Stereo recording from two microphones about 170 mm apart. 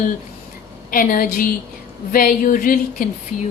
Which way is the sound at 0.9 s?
55° left (ahead or behind).